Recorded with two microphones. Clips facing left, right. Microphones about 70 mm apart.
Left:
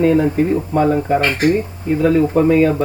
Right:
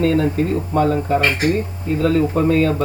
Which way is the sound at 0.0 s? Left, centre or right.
Centre.